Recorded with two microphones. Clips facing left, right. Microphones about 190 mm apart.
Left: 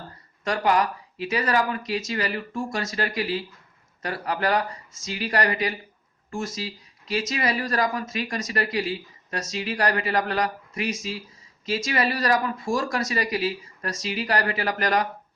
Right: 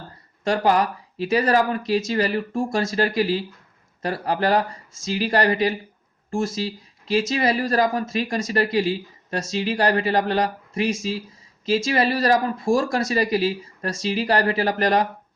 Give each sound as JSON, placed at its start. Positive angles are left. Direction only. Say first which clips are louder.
{"t": 0.4, "sound": "speech", "louder": "right 3 dB", "side_deg": -30}